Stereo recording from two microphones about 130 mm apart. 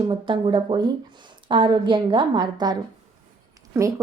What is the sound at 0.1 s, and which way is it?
A woman's voice, 40° right (ahead or behind).